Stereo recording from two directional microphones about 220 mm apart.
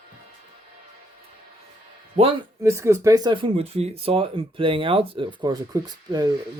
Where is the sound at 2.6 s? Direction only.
10° right (ahead or behind).